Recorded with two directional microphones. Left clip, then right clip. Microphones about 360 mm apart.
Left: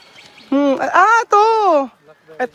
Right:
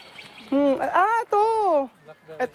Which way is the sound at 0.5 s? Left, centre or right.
Left.